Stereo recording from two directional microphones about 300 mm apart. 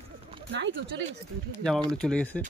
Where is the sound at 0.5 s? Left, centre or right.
Right.